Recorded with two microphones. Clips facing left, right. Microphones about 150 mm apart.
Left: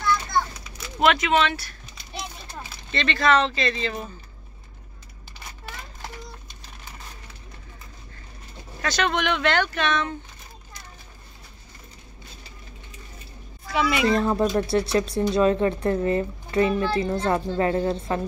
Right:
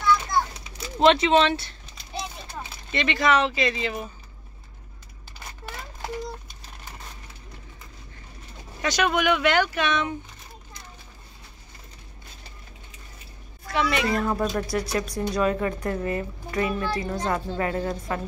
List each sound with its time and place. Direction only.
0.7 s speech: 30° right (ahead or behind)
2.9 s speech: 15° right (ahead or behind)
8.8 s speech: 10° right (ahead or behind)
13.7 s speech: 5° left (ahead or behind)
14.0 s speech: 30° left (ahead or behind)